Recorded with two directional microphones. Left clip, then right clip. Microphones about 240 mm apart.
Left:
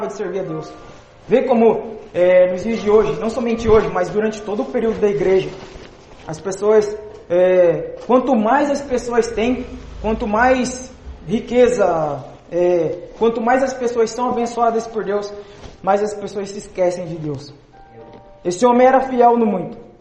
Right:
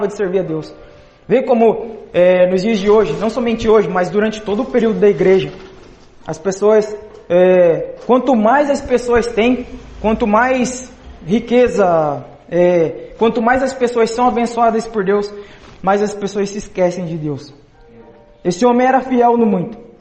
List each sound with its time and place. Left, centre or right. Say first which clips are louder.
0.2 s a man's voice: right 6 dB; right